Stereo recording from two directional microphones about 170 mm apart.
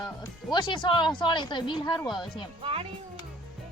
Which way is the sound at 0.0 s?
25° left (ahead or behind).